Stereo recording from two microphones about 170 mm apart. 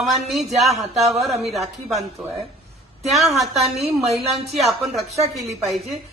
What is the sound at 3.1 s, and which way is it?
Speech, centre (ahead or behind).